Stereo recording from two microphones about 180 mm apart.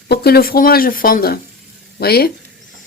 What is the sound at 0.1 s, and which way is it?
Speech, 60° left (ahead or behind).